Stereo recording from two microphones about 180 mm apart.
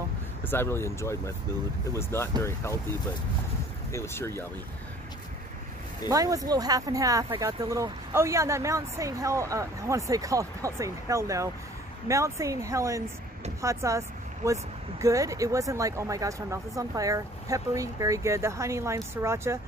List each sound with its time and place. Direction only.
0.5 s speech: 15° left (ahead or behind)
3.9 s speech: 15° left (ahead or behind)
6.0 s speech: 20° right (ahead or behind)